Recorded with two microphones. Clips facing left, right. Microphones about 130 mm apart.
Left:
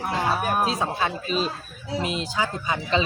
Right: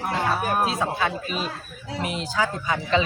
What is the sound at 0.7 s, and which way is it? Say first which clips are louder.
Speech: right 1 dB; 25° left (ahead or behind).